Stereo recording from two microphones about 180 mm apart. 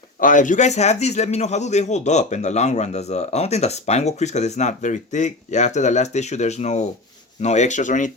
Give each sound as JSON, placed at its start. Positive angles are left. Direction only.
{"t": 0.2, "sound": "speech", "side_deg": 45}